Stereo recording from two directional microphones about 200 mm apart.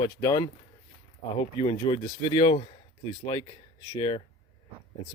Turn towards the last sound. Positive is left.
turn(degrees=25)  # may be behind; listen again after turning